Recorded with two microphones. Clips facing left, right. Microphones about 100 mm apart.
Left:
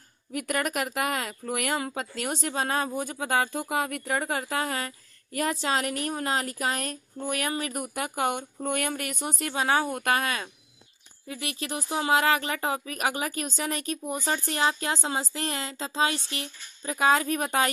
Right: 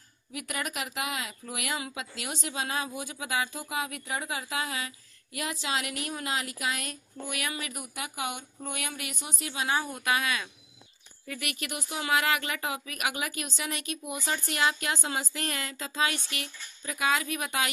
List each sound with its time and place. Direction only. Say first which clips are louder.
0.3 s speech: left 7 dB; 50° left (ahead or behind)
9.7 s speech: left 4 dB; 55° left (ahead or behind)
11.2 s speech: left 3 dB; 25° left (ahead or behind)